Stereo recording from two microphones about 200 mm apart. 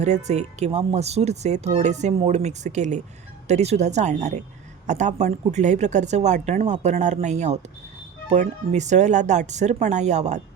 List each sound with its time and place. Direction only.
0.0 s speech: 35° right (ahead or behind)